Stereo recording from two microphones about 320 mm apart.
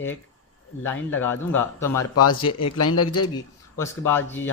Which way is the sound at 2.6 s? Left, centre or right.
Left.